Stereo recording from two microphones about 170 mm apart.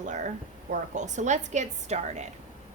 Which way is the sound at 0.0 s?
45° right (ahead or behind).